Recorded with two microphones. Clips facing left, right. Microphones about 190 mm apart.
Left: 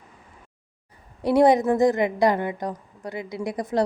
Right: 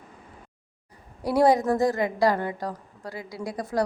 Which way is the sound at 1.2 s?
20° left (ahead or behind).